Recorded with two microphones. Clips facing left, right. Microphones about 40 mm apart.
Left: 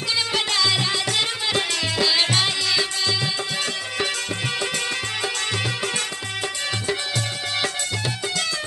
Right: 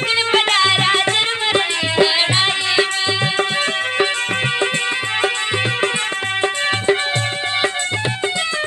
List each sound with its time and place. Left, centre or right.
0.3 s music: right